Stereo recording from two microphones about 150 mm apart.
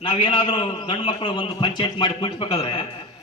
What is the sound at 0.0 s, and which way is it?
A man's voice, 30° left (ahead or behind).